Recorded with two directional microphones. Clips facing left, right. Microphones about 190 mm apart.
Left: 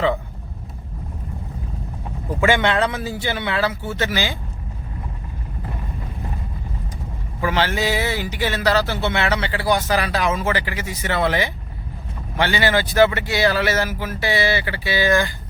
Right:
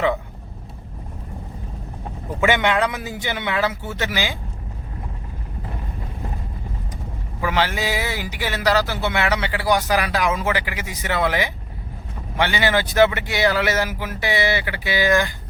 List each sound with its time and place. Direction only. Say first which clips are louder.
2.4 s speech: left 1 dB; 15° right (ahead or behind)
7.4 s speech: left 1 dB; 15° right (ahead or behind)